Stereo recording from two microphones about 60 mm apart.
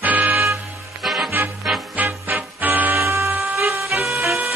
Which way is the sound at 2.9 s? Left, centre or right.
Right.